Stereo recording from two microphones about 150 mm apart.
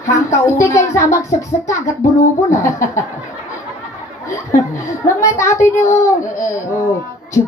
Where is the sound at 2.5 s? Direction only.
20° left (ahead or behind).